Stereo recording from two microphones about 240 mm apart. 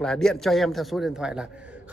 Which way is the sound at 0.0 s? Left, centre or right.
Centre.